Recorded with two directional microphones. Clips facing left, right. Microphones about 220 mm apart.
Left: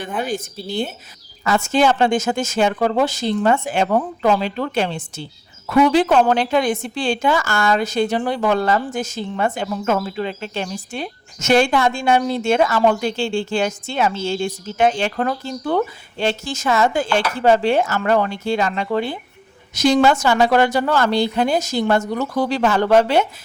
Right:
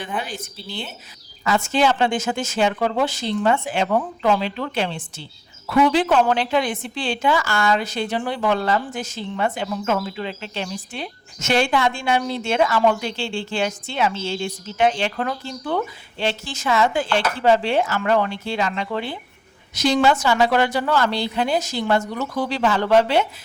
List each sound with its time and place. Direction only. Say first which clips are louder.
0.2 s a woman's voice: left 7 dB; 45° left (ahead or behind)